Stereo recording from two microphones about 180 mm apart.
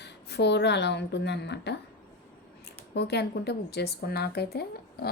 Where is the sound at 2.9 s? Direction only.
65° left (ahead or behind).